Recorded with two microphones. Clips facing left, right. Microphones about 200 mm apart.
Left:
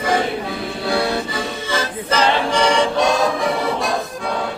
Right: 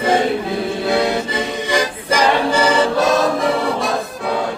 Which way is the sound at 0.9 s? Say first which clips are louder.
Right 1 dB; 20° right (ahead or behind).